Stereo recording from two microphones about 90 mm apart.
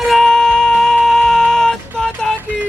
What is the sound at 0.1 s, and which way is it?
Music, 5° left (ahead or behind).